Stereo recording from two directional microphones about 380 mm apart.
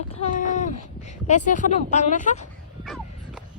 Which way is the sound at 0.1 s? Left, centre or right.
Centre.